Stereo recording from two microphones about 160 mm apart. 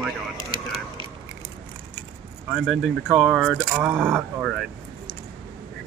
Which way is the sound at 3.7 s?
10° right (ahead or behind).